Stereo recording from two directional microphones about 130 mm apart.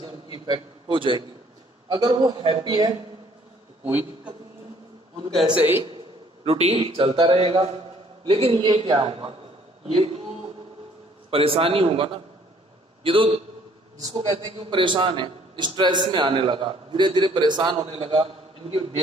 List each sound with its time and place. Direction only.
0.0 s a sound: 35° right (ahead or behind)
1.9 s a man's voice: 30° right (ahead or behind)
5.3 s a man's voice: centre (ahead or behind)
6.4 s a man's voice: 50° right (ahead or behind)
11.2 s a man's voice: 45° right (ahead or behind)